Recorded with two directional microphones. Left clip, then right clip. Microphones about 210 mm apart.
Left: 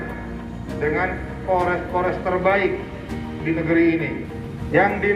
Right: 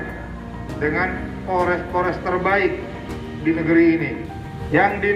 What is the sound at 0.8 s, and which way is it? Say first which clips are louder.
A man's voice: right 1 dB; 40° right (ahead or behind).